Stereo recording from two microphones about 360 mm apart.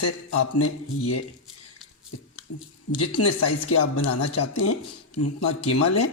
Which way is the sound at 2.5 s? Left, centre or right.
Left.